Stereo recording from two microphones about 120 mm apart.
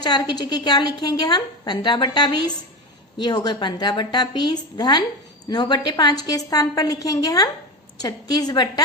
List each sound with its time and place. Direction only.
0.0 s a woman's voice: 35° left (ahead or behind)